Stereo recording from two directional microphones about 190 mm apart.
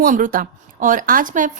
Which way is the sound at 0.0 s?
45° right (ahead or behind).